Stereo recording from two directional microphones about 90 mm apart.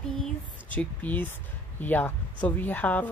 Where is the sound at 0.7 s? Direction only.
20° left (ahead or behind).